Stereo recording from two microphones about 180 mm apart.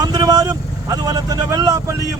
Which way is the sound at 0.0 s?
20° right (ahead or behind).